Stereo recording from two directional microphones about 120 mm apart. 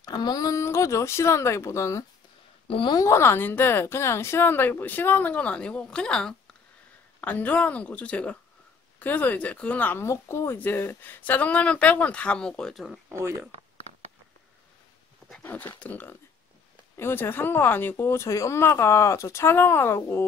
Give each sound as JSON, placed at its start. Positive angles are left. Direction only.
{"t": 0.0, "sound": "speech", "side_deg": 35}
{"t": 2.7, "sound": "speech", "side_deg": 40}
{"t": 3.0, "sound": "speech", "side_deg": 25}
{"t": 13.1, "sound": "speech", "side_deg": -25}
{"t": 15.4, "sound": "speech", "side_deg": 15}